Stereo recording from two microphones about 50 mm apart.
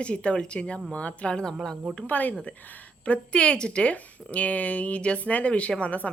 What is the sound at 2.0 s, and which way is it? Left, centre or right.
Speech, left.